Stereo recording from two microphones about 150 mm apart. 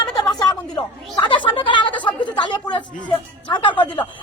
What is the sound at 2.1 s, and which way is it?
Chatter, 30° left (ahead or behind).